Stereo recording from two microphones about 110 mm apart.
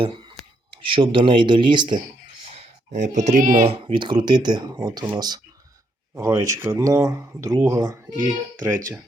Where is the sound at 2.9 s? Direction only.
90° right.